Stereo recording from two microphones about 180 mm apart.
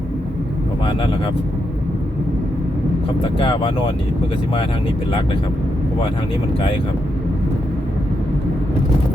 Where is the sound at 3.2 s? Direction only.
30° left (ahead or behind).